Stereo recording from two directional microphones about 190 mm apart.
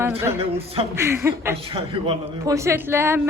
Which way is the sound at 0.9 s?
15° right (ahead or behind).